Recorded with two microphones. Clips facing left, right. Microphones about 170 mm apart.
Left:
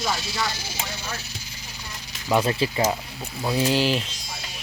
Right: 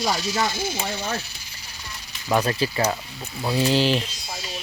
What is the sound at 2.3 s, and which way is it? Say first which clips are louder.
Speech: even; 15° left (ahead or behind).